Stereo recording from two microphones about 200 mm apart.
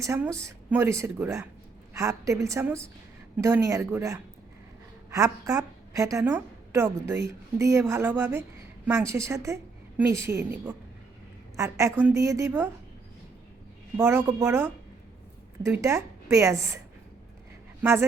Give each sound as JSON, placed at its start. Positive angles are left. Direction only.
{"t": 0.0, "sound": "a woman's voice", "side_deg": -15}
{"t": 11.5, "sound": "speech", "side_deg": -15}
{"t": 13.9, "sound": "speech", "side_deg": -10}